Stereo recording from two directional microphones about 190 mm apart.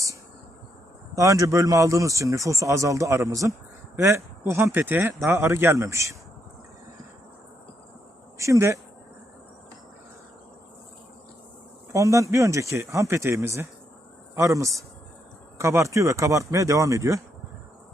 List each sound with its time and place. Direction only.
1.1 s speech: 15° right (ahead or behind)
8.4 s speech: 15° right (ahead or behind)
11.9 s speech: 15° right (ahead or behind)